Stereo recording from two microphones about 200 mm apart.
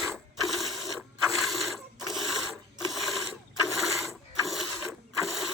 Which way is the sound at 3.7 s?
Centre (ahead or behind).